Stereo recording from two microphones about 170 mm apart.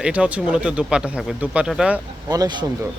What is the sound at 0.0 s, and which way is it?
Speech, 5° right (ahead or behind).